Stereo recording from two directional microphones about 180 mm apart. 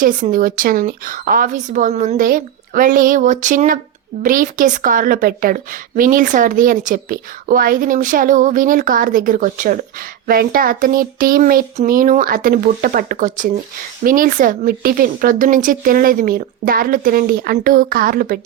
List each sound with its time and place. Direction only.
0.0 s a woman's voice: 50° right (ahead or behind)